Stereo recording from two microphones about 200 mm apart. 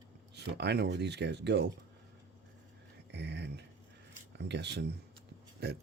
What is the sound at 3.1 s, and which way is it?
Speech, 60° right (ahead or behind).